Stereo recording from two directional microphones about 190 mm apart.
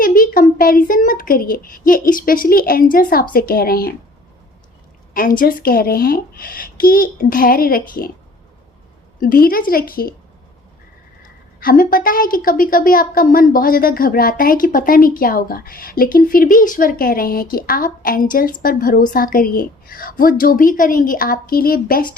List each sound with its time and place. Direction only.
0.0 s a sound: 45° left (ahead or behind)
0.9 s a woman's voice: 45° left (ahead or behind)
5.1 s a woman's voice: 45° left (ahead or behind)
9.2 s a woman's voice: 50° left (ahead or behind)
11.2 s a woman's voice: 50° left (ahead or behind)